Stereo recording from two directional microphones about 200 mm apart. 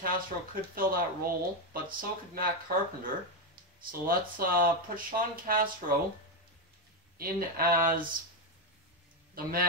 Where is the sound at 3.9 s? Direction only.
45° right (ahead or behind).